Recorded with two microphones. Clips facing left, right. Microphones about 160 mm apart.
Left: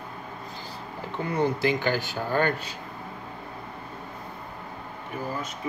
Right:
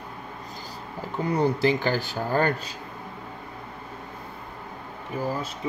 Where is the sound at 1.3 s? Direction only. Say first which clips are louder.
Right 2 dB; 35° right (ahead or behind).